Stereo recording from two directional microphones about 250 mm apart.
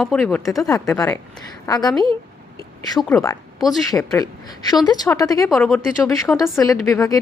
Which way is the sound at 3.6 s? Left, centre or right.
Centre.